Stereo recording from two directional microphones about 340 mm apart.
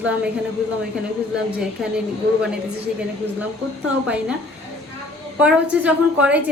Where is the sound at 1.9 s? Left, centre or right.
Centre.